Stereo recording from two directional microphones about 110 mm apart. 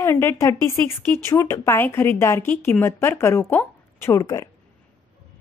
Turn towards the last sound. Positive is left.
turn(degrees=30)  # may be behind; listen again after turning